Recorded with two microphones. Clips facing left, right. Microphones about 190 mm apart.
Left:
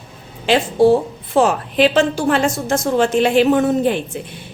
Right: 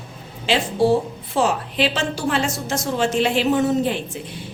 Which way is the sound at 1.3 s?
50° left (ahead or behind).